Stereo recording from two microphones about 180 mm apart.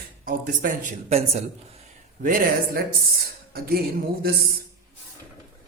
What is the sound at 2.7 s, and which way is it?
Speech, 55° right (ahead or behind).